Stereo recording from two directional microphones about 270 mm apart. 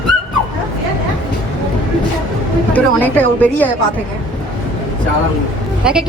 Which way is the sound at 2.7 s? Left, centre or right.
Centre.